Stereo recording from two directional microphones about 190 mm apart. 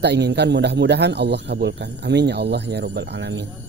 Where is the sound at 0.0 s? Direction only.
60° right (ahead or behind).